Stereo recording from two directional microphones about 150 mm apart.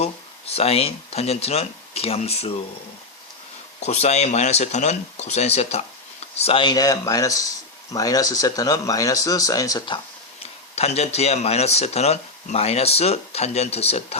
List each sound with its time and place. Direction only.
0.0 s speech: 40° left (ahead or behind)
3.8 s speech: 45° left (ahead or behind); by 10.0 s 30° left (ahead or behind)
10.4 s speech: 45° left (ahead or behind)